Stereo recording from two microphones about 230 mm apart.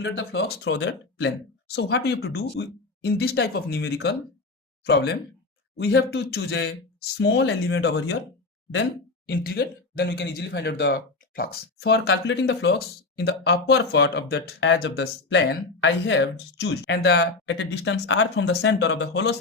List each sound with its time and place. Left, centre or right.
0.0 s speech: left